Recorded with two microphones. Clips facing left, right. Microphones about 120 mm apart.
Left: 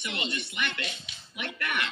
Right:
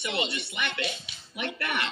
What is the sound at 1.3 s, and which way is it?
Speech, 35° right (ahead or behind).